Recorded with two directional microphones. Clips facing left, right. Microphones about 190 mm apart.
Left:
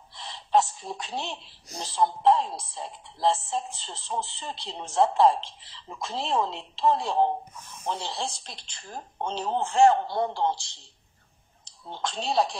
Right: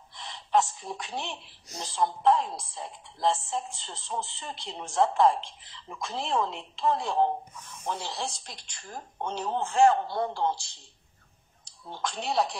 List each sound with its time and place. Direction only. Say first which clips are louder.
0.1 s a sound: left 2 dB; 35° left (ahead or behind)
0.7 s a woman's voice: left 1 dB; 30° left (ahead or behind)
11.9 s a man's voice: left 2 dB; 25° left (ahead or behind)